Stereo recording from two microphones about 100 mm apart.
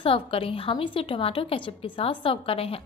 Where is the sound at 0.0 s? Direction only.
65° left (ahead or behind).